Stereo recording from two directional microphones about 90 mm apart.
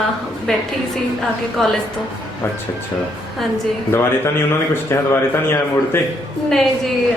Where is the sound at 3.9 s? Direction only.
30° left (ahead or behind).